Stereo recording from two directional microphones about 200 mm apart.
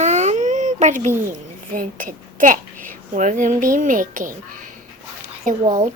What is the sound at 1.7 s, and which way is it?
A child's voice, 40° right (ahead or behind).